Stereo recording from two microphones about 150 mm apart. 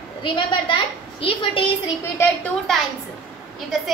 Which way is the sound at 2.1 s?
10° left (ahead or behind).